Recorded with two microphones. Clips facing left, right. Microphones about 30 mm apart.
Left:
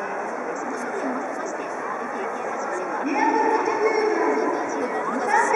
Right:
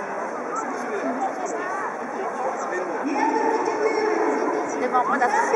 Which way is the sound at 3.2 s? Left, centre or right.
Centre.